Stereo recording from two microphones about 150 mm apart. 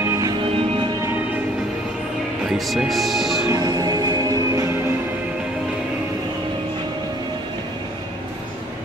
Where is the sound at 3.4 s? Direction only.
25° right (ahead or behind).